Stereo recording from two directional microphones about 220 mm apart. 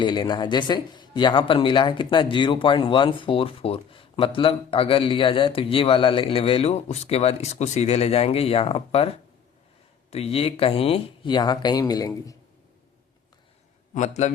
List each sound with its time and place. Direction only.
0.0 s speech: 20° left (ahead or behind)
13.9 s a man's voice: 30° left (ahead or behind)